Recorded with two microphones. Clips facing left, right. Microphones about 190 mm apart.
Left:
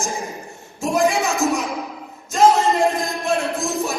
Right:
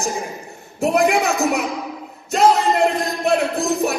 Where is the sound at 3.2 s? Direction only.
60° right (ahead or behind).